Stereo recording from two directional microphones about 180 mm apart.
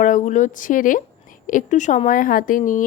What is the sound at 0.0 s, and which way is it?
A woman's voice, 45° left (ahead or behind).